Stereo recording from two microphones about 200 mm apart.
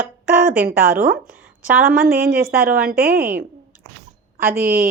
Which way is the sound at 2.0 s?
45° right (ahead or behind).